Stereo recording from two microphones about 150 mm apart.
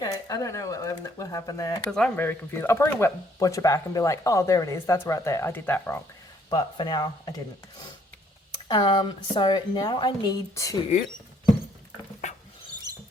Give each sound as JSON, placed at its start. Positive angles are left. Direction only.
{"t": 0.0, "sound": "speech", "side_deg": 25}
{"t": 1.9, "sound": "speech", "side_deg": 5}
{"t": 6.5, "sound": "speech", "side_deg": 30}
{"t": 8.6, "sound": "a woman's voice", "side_deg": 30}
{"t": 12.9, "sound": "rodents", "side_deg": -25}